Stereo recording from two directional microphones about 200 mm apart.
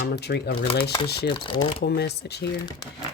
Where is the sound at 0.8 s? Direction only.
25° left (ahead or behind).